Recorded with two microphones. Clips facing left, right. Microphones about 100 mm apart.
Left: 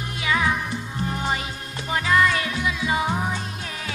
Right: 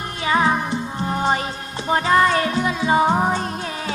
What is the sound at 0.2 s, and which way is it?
Music, 35° right (ahead or behind).